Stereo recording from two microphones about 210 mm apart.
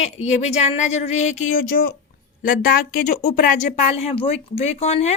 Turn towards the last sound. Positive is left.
turn(degrees=30)  # may be behind; listen again after turning